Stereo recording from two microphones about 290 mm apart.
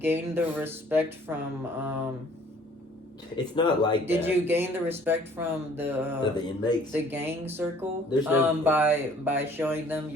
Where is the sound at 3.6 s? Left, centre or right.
Centre.